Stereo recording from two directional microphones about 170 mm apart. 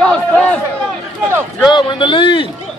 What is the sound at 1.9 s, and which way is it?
Speech, 30° left (ahead or behind).